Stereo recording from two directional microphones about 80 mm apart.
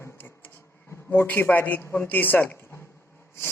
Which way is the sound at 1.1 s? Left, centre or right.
Left.